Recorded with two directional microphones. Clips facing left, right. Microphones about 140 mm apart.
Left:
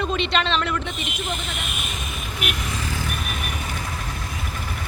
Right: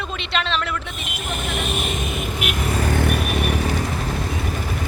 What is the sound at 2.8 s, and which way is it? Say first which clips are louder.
Vehicle: right 9 dB; 60° right (ahead or behind).